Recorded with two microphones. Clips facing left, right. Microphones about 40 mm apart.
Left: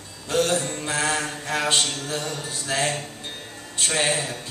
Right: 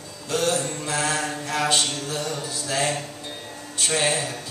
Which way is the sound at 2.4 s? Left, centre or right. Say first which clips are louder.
Right 1 dB; left.